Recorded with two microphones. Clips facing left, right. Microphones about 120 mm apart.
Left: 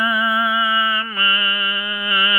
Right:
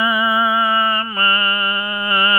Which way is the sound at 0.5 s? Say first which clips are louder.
Right 3 dB; 40° right (ahead or behind).